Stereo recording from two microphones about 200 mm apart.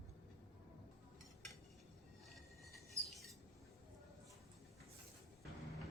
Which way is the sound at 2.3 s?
Centre (ahead or behind).